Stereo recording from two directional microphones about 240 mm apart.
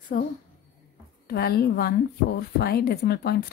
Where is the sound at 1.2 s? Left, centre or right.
Left.